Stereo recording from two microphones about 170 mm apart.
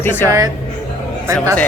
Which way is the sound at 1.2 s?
15° right (ahead or behind).